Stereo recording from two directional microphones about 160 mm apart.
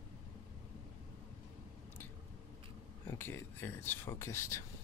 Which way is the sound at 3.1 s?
15° left (ahead or behind).